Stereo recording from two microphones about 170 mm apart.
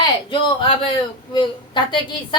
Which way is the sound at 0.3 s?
30° left (ahead or behind).